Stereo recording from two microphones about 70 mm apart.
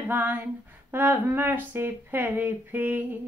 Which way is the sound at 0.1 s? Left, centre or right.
Right.